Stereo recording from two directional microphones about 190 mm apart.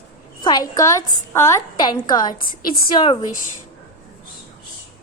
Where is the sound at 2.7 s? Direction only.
50° left (ahead or behind).